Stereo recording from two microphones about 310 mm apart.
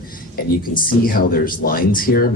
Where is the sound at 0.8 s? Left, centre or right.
Left.